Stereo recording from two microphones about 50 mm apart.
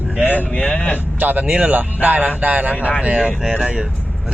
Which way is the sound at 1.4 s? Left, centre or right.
Right.